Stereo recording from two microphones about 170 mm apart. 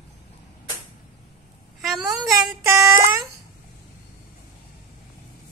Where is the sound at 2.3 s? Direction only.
15° right (ahead or behind).